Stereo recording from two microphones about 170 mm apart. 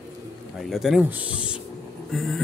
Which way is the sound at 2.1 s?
Centre (ahead or behind).